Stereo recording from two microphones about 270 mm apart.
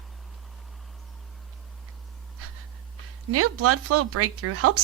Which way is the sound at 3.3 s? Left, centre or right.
Right.